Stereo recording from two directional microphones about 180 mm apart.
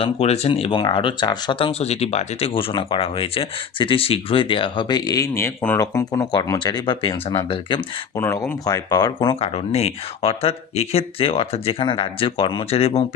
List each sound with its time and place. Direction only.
0.0 s speech: 35° left (ahead or behind)
8.1 s speech: 15° left (ahead or behind); by 13.1 s 35° left (ahead or behind)